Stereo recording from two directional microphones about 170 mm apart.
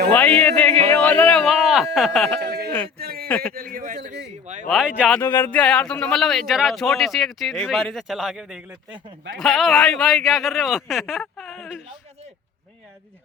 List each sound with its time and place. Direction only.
0.4 s speech: 5° left (ahead or behind)
0.9 s music: 10° left (ahead or behind)
2.4 s speech: 75° right (ahead or behind)
3.0 s speech: 65° right (ahead or behind)
3.2 s a man's voice: 5° left (ahead or behind)
3.5 s a man's voice: 55° right (ahead or behind)
4.7 s speech: 5° right (ahead or behind)
5.1 s speech: 10° left (ahead or behind); by 8.6 s 5° right (ahead or behind)
8.7 s speech: 30° right (ahead or behind)
9.4 s speech: centre (ahead or behind)